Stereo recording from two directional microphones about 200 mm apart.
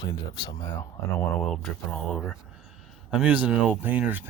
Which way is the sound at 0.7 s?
5° left (ahead or behind).